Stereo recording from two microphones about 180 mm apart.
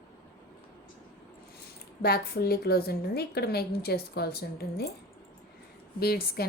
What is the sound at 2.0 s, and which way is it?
Speech, 60° left (ahead or behind).